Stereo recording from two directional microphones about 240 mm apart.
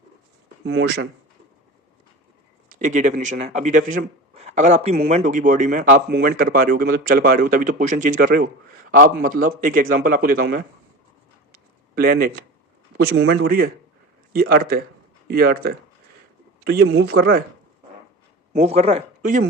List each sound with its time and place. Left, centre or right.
0.6 s speech: right
2.8 s a man's voice: right
11.5 s a sound: right
13.0 s a man's voice: right
17.0 s a man's voice: right
18.5 s speech: right